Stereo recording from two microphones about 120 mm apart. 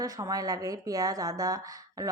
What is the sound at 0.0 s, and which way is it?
A woman's voice, 30° right (ahead or behind).